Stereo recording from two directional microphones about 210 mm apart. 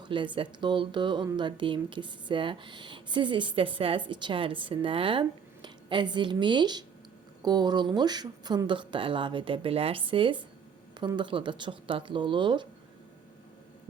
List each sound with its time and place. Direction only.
0.0 s a woman's voice: 25° right (ahead or behind)